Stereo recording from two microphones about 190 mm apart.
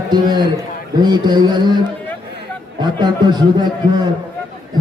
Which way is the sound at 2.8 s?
25° right (ahead or behind).